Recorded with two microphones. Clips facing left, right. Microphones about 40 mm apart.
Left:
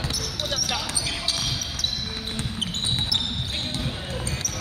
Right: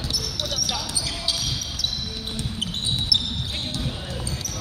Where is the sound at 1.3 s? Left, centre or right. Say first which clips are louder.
Even; left.